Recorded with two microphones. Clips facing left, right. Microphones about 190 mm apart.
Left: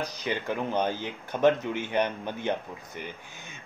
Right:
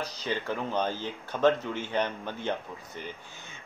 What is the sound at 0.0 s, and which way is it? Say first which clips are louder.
Speech: left 1 dB; 15° left (ahead or behind).